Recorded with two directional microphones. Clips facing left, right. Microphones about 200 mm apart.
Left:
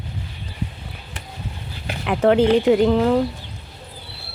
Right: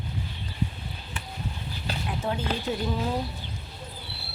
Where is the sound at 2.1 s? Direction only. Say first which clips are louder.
Left 16 dB; 80° left.